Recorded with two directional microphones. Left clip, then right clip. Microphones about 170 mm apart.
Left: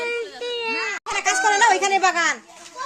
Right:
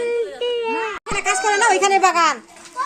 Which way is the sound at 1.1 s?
35° left (ahead or behind).